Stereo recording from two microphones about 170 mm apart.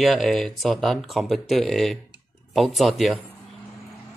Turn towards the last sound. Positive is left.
turn(degrees=0)  # may be behind; listen again after turning